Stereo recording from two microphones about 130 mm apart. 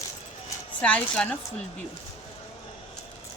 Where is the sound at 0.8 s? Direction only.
10° left (ahead or behind).